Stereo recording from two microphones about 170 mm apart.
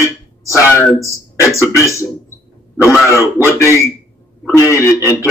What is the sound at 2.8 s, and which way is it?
Speech, 15° left (ahead or behind).